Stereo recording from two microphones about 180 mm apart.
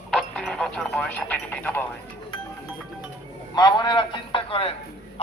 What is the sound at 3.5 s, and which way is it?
A man's voice, 25° left (ahead or behind).